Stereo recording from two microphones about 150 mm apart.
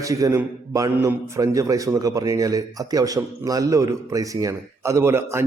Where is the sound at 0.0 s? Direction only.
20° right (ahead or behind).